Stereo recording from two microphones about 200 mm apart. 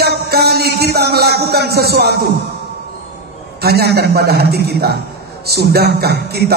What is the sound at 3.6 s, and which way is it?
A man's voice, 55° right (ahead or behind).